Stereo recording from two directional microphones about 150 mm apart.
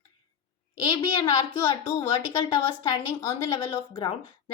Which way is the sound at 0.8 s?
35° left (ahead or behind).